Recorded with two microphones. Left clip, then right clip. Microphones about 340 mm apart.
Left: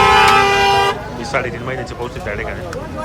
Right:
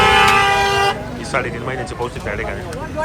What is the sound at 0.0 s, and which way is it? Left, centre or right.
Vehicle, left.